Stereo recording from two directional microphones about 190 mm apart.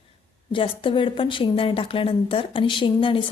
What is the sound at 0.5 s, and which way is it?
A woman's voice, 25° left (ahead or behind).